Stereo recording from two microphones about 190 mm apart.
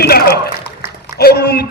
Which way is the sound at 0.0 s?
55° left (ahead or behind).